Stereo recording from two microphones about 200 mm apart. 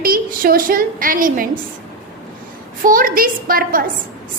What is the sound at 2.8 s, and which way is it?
A woman's voice, 45° right (ahead or behind).